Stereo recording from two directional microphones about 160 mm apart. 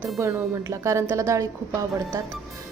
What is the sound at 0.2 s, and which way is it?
A woman's voice, 20° right (ahead or behind).